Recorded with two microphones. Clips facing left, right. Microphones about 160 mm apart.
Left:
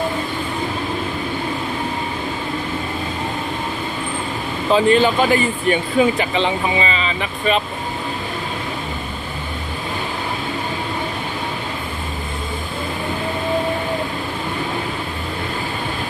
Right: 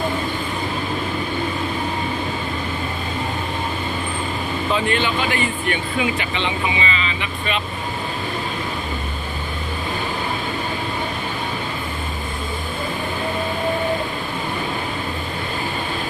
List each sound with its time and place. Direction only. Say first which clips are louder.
4.7 s speech: left 8 dB; 35° left (ahead or behind)